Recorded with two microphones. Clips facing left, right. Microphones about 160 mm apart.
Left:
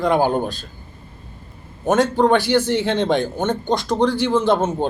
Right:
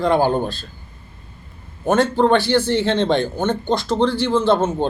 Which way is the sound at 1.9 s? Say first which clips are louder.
Even; 10° left (ahead or behind).